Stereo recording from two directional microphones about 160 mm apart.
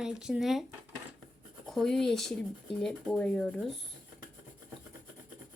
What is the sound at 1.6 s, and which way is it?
Speech, 5° left (ahead or behind).